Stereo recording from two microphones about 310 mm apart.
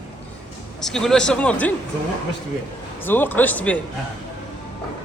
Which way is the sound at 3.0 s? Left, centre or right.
Centre.